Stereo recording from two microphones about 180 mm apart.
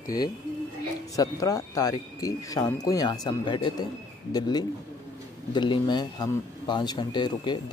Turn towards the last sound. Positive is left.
turn(degrees=25)  # may be behind; listen again after turning